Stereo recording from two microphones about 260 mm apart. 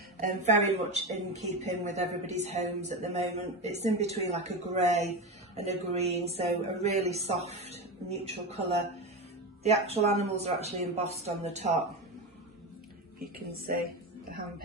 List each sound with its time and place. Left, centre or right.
0.2 s a woman's voice: right
13.5 s a woman's voice: right